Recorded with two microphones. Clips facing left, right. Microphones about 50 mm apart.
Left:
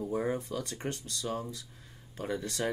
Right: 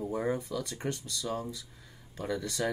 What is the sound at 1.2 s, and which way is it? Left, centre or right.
Speech, left.